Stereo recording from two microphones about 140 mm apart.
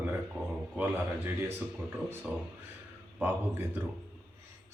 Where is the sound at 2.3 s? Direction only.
10° right (ahead or behind).